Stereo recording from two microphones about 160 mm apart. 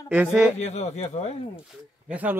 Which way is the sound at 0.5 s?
45° left (ahead or behind).